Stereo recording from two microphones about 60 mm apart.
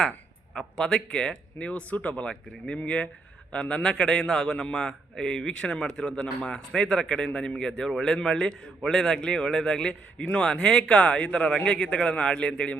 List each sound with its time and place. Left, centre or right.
0.5 s a man's voice: centre